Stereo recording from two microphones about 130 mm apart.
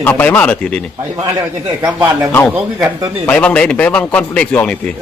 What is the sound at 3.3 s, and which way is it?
A man's voice, 10° left (ahead or behind).